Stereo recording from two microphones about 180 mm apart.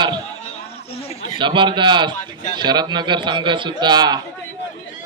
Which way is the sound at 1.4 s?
25° right (ahead or behind).